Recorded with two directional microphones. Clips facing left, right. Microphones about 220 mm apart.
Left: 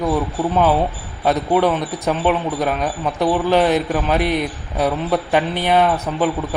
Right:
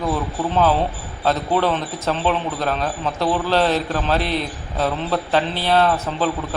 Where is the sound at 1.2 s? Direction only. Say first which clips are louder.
Left 3 dB; 15° left (ahead or behind).